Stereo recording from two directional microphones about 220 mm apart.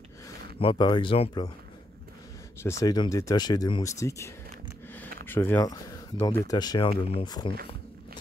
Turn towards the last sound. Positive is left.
turn(degrees=20)  # may be behind; listen again after turning